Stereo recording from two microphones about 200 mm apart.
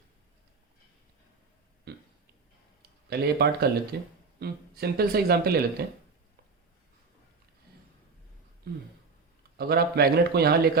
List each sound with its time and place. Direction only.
1.9 s burping: 55° right (ahead or behind)
3.1 s a man's voice: 55° right (ahead or behind)
8.7 s a man's voice: 50° right (ahead or behind)